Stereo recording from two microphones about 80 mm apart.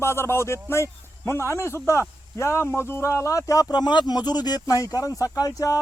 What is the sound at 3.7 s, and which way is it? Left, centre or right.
Speech, left.